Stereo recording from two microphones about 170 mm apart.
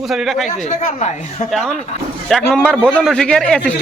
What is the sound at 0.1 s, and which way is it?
Speech, centre (ahead or behind).